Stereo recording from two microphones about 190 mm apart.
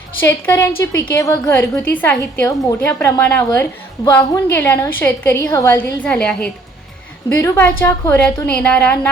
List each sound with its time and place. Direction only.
0.2 s a woman's voice: 10° left (ahead or behind)